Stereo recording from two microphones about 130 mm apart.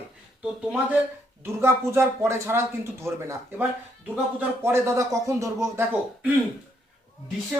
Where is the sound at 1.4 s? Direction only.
20° right (ahead or behind).